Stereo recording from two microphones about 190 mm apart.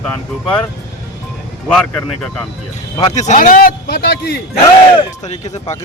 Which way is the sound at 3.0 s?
35° left (ahead or behind).